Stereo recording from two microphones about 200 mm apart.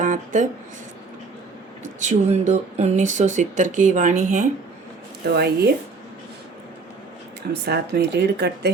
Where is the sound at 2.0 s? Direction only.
35° right (ahead or behind).